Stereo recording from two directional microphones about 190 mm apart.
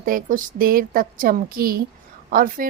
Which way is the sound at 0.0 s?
45° right (ahead or behind).